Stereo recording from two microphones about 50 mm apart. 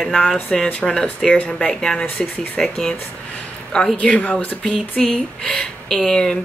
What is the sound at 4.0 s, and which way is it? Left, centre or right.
Speech, left.